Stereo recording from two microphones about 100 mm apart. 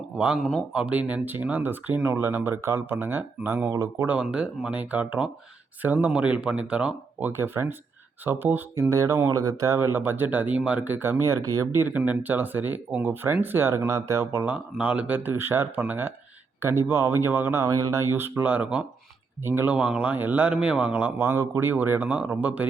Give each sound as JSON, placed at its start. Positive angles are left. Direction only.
{"t": 0.7, "sound": "a man's voice", "side_deg": -10}
{"t": 4.0, "sound": "a man's voice", "side_deg": -15}
{"t": 14.5, "sound": "speech", "side_deg": -10}
{"t": 19.7, "sound": "a man's voice", "side_deg": -10}